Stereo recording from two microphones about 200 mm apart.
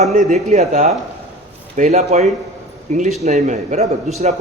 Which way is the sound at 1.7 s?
35° right (ahead or behind).